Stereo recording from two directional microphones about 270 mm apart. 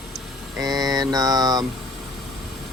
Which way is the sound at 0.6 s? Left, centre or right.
Centre.